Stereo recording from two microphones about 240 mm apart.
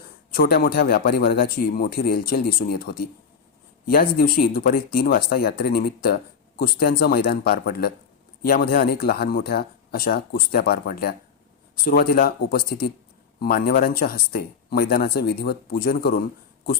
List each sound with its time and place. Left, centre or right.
0.3 s speech: left